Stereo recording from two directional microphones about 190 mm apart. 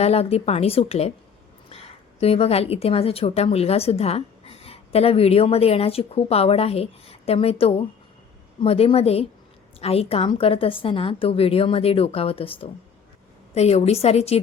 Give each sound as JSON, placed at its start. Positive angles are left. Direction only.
{"t": 0.0, "sound": "a woman's voice", "side_deg": 35}
{"t": 2.2, "sound": "a woman's voice", "side_deg": 30}